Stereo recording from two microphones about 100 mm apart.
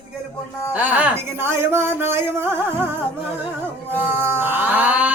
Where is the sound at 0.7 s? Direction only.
15° right (ahead or behind).